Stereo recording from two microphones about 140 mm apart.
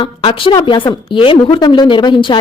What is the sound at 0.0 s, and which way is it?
A woman's voice, 40° left (ahead or behind).